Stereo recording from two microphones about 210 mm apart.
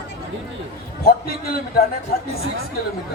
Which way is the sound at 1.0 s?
45° left (ahead or behind).